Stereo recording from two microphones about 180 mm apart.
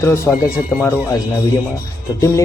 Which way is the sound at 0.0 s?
15° left (ahead or behind).